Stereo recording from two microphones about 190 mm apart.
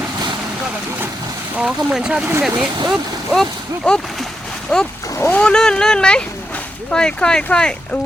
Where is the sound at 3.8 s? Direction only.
Centre (ahead or behind).